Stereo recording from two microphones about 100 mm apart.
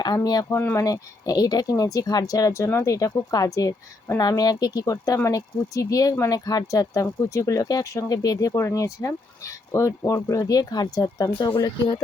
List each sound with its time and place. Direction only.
0.2 s speech: 40° left (ahead or behind)
0.5 s speech: 20° left (ahead or behind)
0.8 s speech: 35° left (ahead or behind)